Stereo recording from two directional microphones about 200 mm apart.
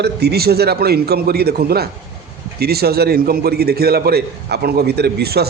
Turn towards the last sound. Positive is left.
turn(degrees=-50)  # may be behind; listen again after turning